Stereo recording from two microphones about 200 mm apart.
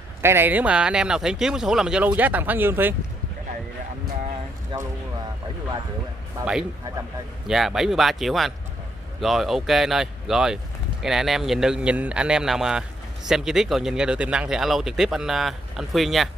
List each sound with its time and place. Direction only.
0.2 s speech: 10° right (ahead or behind)
4.7 s speech: 25° right (ahead or behind)
7.4 s speech: centre (ahead or behind)